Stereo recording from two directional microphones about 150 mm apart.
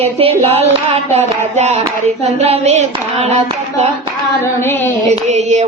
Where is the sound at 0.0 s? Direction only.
40° right (ahead or behind).